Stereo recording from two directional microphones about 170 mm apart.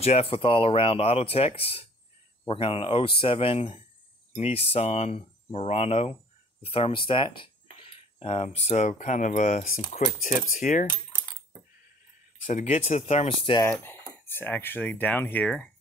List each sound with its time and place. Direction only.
0.0 s speech: 35° left (ahead or behind)
7.8 s a sound: 35° left (ahead or behind)
8.5 s speech: 40° left (ahead or behind)
12.4 s speech: 45° left (ahead or behind)
13.6 s speech: 15° left (ahead or behind)